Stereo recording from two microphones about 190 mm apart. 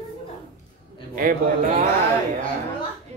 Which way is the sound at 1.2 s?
45° right (ahead or behind).